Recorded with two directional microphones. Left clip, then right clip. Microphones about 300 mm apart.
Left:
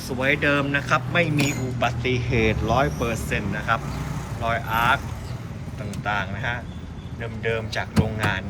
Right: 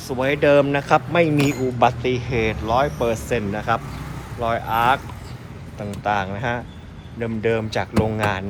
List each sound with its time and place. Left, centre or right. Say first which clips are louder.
0.2 s a man's voice: right 5 dB; centre
6.0 s a man's voice: right 4 dB; centre